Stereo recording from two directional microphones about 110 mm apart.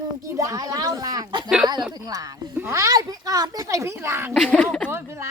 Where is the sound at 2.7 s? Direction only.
30° right (ahead or behind).